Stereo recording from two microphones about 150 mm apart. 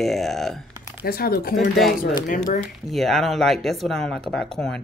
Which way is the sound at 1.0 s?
90° left.